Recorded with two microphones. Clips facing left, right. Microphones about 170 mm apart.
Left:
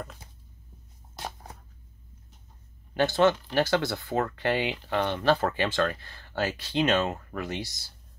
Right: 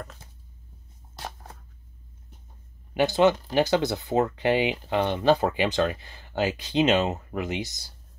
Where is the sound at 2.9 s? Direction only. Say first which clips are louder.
Right 2 dB; 15° right (ahead or behind).